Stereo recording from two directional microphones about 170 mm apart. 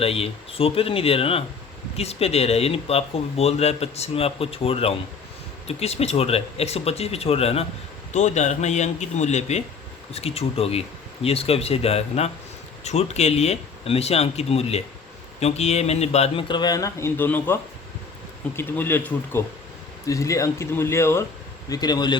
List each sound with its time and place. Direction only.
0.0 s a man's voice: 35° left (ahead or behind)